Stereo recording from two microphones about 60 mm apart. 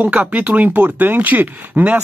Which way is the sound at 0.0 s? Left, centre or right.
Right.